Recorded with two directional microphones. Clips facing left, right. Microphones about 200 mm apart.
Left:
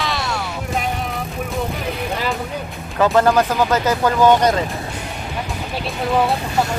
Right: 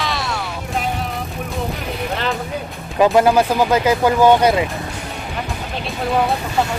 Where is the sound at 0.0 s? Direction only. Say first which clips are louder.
Even; centre (ahead or behind).